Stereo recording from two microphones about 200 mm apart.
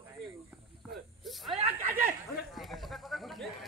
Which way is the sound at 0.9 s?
Centre (ahead or behind).